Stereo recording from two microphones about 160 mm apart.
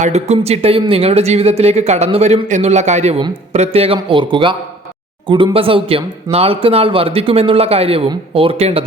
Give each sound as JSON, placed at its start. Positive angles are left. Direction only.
{"t": 0.0, "sound": "a man's voice", "side_deg": -45}